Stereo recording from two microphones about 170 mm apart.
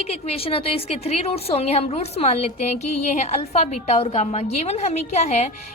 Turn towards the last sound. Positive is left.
turn(degrees=40)  # may be behind; listen again after turning